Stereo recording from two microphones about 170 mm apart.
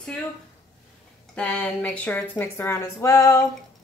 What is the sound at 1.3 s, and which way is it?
A woman's voice, 5° left (ahead or behind).